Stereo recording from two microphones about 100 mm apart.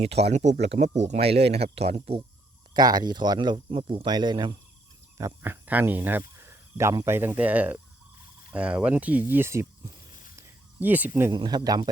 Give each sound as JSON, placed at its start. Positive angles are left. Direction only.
{"t": 0.0, "sound": "speech", "side_deg": -90}
{"t": 2.7, "sound": "speech", "side_deg": -45}
{"t": 4.0, "sound": "speech", "side_deg": -45}
{"t": 5.4, "sound": "speech", "side_deg": -20}
{"t": 10.8, "sound": "speech", "side_deg": -15}
{"t": 11.3, "sound": "speech", "side_deg": -45}